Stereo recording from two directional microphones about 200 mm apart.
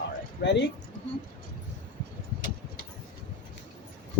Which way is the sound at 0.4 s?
60° left (ahead or behind).